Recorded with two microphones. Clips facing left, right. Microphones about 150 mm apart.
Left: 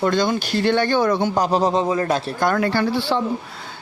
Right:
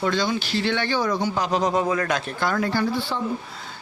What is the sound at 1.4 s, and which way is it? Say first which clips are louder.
Speech: left 4 dB; 35° left (ahead or behind).